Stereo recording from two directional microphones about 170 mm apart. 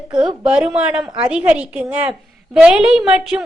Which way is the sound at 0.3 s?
5° right (ahead or behind).